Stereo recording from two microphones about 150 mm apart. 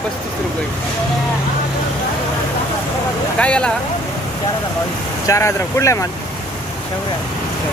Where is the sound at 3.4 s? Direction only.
5° left (ahead or behind).